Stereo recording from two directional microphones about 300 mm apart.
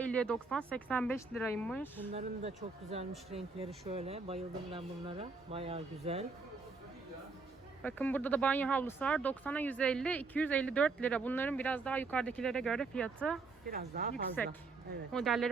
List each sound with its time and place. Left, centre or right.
0.0 s speech: centre
2.1 s speech: right
7.8 s speech: centre
13.7 s speech: right
14.4 s speech: centre